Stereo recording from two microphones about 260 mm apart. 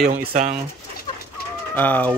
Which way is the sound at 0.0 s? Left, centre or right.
Right.